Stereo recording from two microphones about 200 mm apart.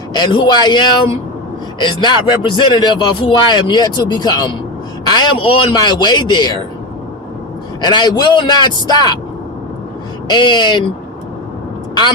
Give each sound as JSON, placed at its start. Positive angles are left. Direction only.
{"t": 0.1, "sound": "a man's voice", "side_deg": 25}
{"t": 7.8, "sound": "a man's voice", "side_deg": 20}
{"t": 10.2, "sound": "a man's voice", "side_deg": 20}